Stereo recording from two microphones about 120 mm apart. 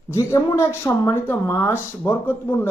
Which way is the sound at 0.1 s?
25° left (ahead or behind).